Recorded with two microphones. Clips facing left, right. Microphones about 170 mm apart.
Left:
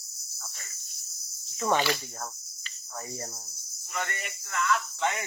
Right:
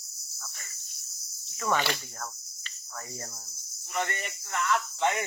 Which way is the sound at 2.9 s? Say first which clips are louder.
Left 3 dB; 20° left (ahead or behind).